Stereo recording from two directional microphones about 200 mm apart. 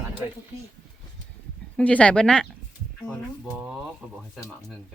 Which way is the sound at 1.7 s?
5° left (ahead or behind).